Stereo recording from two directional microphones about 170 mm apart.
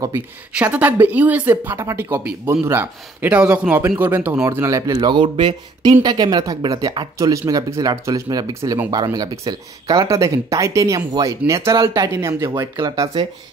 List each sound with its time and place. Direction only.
0.6 s a man's voice: 10° right (ahead or behind)